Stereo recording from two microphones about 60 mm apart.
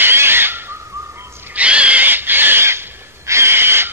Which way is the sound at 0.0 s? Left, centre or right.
Right.